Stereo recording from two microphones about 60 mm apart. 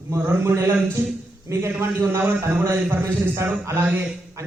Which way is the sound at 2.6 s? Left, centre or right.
Right.